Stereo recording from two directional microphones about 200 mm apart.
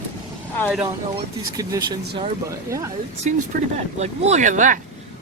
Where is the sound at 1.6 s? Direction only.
15° right (ahead or behind).